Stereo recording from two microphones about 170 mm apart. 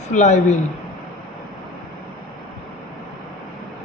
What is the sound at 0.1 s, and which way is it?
Speech, 45° left (ahead or behind).